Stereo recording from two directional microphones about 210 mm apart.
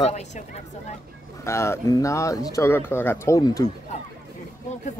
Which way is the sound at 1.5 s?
15° left (ahead or behind).